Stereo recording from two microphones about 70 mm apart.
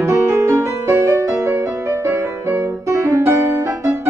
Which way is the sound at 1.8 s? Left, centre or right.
Right.